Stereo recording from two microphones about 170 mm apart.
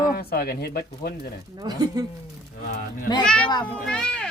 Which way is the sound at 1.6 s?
25° right (ahead or behind).